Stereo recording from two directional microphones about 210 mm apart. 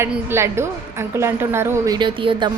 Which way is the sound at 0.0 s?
10° right (ahead or behind).